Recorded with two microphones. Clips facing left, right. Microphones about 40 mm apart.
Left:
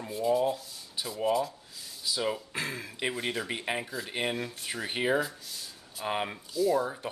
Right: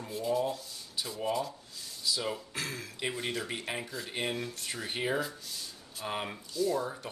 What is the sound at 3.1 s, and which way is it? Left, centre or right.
Speech, centre.